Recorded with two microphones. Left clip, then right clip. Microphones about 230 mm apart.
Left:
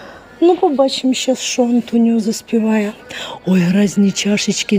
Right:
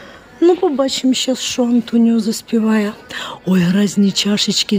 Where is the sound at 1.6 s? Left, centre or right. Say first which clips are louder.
Right 2 dB; centre.